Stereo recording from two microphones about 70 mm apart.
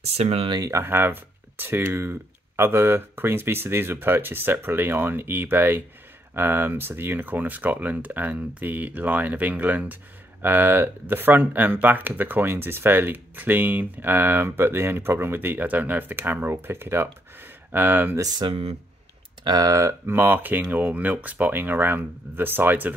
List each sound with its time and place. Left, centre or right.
0.7 s speech: right
19.4 s speech: right